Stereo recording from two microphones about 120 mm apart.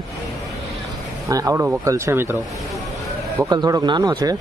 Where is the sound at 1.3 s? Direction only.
25° right (ahead or behind).